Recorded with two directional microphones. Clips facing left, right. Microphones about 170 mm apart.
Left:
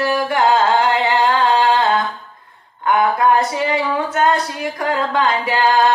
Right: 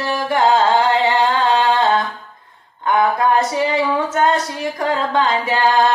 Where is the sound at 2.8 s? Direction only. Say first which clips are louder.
Left 1 dB; 25° right (ahead or behind).